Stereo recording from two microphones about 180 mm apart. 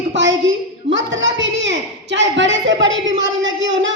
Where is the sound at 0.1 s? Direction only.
90° right.